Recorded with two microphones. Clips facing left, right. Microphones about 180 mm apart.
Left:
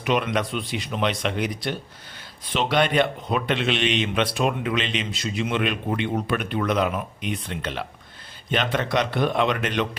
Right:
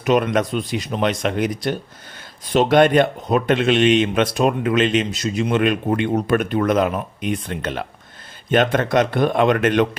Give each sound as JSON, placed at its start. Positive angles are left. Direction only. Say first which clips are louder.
{"t": 0.0, "sound": "speech", "louder": "right 6 dB", "side_deg": -45}